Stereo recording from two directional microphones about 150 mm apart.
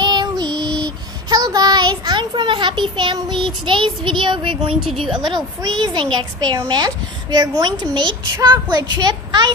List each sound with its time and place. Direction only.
0.0 s child singing: 30° right (ahead or behind)
5.2 s a child's voice: 30° right (ahead or behind)